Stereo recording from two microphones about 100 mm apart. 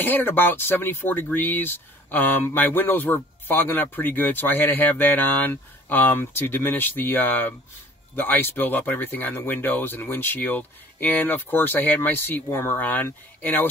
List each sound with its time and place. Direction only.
0.0 s speech: 20° left (ahead or behind)